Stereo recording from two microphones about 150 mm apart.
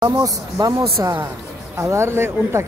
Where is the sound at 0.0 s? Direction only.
25° right (ahead or behind).